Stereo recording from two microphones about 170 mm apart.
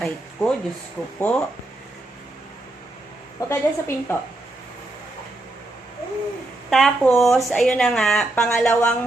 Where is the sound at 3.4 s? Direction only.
15° left (ahead or behind).